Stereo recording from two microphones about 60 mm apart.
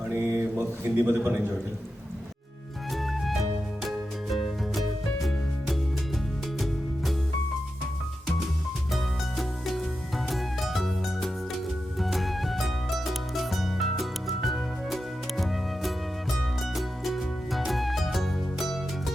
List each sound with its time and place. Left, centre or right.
0.1 s speech: right
3.0 s music: centre
10.2 s music: centre